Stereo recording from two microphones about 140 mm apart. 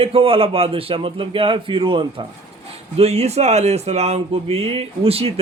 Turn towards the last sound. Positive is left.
turn(degrees=-45)  # may be behind; listen again after turning